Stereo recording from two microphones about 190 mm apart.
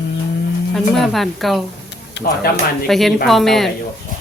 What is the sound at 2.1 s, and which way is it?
Speech, 55° left (ahead or behind).